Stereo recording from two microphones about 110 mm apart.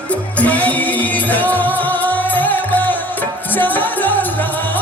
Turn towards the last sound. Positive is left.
turn(degrees=15)  # may be behind; listen again after turning